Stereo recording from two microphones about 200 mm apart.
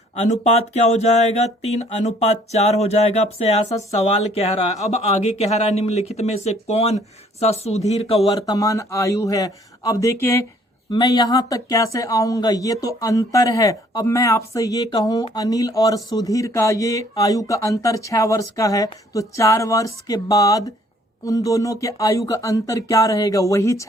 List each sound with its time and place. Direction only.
0.2 s speech: 35° left (ahead or behind); by 23.8 s 15° left (ahead or behind)